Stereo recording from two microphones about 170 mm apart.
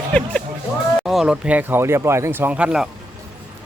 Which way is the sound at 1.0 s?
Centre (ahead or behind).